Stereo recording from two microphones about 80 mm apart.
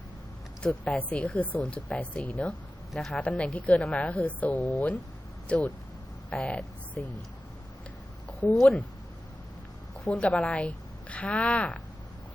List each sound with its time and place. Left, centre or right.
0.6 s a woman's voice: centre
2.9 s speech: centre
3.2 s a woman's voice: centre
8.3 s a sound: centre
8.5 s speech: centre
10.2 s a woman's voice: centre